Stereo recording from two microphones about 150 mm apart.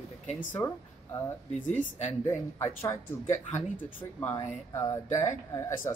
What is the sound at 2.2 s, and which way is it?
Speech, 15° left (ahead or behind).